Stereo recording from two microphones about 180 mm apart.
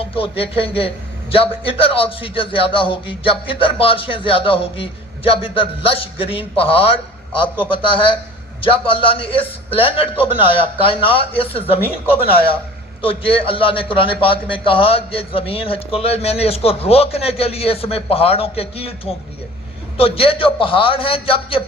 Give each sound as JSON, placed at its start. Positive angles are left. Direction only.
{"t": 0.0, "sound": "a man's voice", "side_deg": 30}
{"t": 13.0, "sound": "a man's voice", "side_deg": 30}
{"t": 20.0, "sound": "a man's voice", "side_deg": 30}